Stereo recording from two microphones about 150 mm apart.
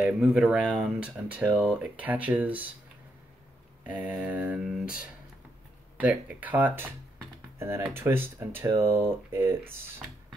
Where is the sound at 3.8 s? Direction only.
10° right (ahead or behind).